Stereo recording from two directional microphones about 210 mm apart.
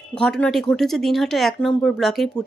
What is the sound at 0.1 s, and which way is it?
Speech, 5° left (ahead or behind).